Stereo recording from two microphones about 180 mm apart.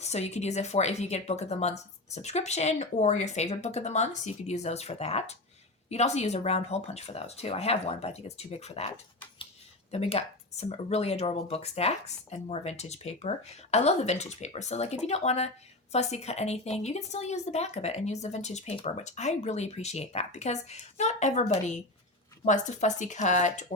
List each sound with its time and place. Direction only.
0.0 s a woman's voice: 40° left (ahead or behind)
9.9 s a woman's voice: 35° left (ahead or behind)